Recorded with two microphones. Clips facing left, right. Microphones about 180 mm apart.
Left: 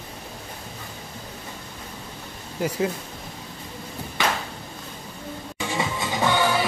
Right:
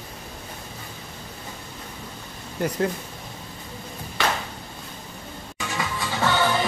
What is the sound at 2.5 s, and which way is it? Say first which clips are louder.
Speech: even; 5° left (ahead or behind).